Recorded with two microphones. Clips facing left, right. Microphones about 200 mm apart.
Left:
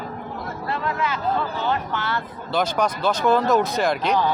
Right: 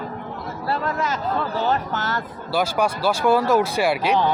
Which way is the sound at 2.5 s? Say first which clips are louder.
Right 1 dB; 10° right (ahead or behind).